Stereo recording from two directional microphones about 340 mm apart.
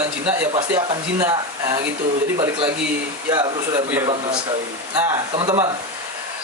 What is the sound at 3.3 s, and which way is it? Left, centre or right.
Speech, centre.